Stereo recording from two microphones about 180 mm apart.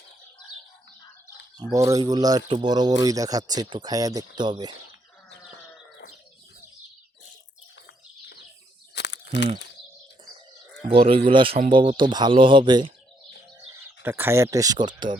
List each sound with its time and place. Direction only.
1.7 s speech: 20° right (ahead or behind)
9.0 s a sound: 75° left (ahead or behind)
10.8 s speech: 30° right (ahead or behind)
13.7 s speech: 15° right (ahead or behind)